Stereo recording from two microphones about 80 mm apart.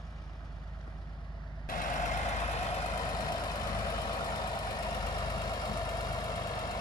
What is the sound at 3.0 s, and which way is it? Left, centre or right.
Vehicle, left.